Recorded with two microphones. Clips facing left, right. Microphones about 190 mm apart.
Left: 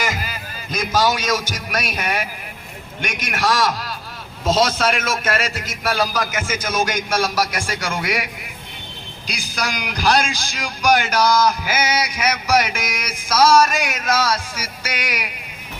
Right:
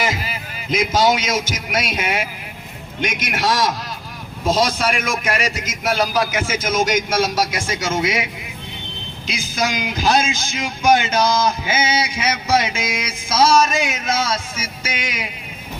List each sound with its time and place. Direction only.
0.9 s a man's voice: 25° right (ahead or behind)
4.4 s a man's voice: 10° right (ahead or behind)